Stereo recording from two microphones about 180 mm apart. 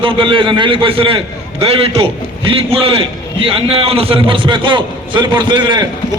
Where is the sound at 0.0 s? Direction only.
30° right (ahead or behind).